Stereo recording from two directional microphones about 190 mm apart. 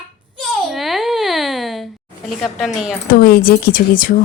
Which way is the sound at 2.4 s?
Centre (ahead or behind).